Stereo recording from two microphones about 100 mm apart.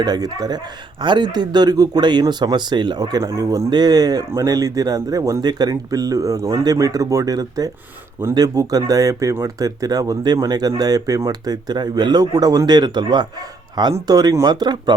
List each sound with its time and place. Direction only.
0.0 s a man's voice: 40° right (ahead or behind)